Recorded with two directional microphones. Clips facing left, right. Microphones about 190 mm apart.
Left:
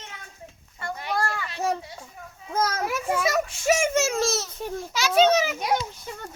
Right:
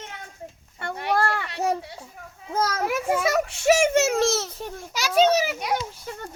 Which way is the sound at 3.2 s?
65° right (ahead or behind).